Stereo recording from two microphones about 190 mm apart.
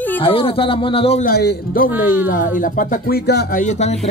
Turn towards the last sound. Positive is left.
turn(degrees=35)  # may be behind; listen again after turning